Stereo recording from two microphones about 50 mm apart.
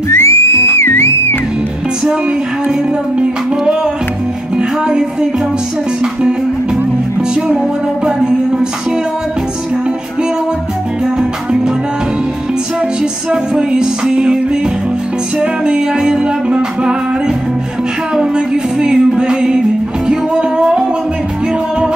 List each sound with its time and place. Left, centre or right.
0.1 s music: left
0.8 s music: left
8.0 s music: centre
13.3 s music: centre
15.6 s music: centre
18.1 s music: centre